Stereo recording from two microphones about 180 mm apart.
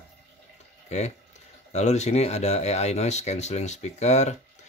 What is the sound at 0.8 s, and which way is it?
Speech, 40° left (ahead or behind).